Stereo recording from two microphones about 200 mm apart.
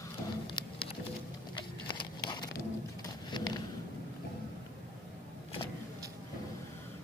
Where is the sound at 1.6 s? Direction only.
25° left (ahead or behind).